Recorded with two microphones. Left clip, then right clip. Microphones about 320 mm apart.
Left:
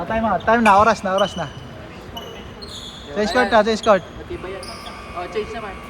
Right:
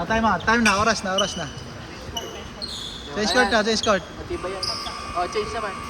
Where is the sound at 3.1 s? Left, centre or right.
Centre.